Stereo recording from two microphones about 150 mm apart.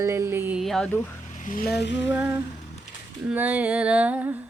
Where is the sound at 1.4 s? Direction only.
70° left (ahead or behind).